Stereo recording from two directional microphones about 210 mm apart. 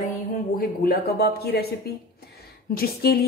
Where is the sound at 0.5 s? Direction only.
45° left (ahead or behind).